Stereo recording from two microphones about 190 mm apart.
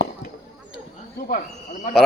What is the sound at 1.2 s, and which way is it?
Speech, 45° left (ahead or behind).